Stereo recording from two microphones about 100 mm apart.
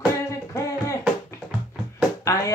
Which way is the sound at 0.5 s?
30° left (ahead or behind).